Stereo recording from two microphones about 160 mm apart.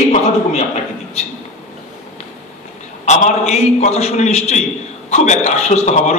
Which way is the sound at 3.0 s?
45° left (ahead or behind).